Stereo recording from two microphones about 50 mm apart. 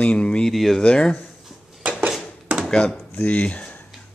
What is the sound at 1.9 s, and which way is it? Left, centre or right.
Dishes, right.